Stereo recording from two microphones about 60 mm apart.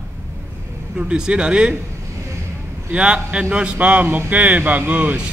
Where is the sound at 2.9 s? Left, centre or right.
Centre.